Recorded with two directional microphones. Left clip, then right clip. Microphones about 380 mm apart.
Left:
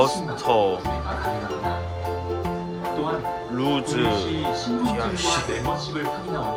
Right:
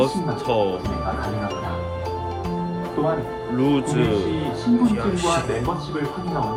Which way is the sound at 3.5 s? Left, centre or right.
Centre.